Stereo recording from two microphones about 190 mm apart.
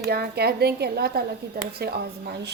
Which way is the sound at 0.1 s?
55° right (ahead or behind).